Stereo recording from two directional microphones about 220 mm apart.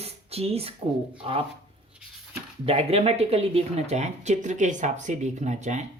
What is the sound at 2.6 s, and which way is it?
Speech, 25° right (ahead or behind).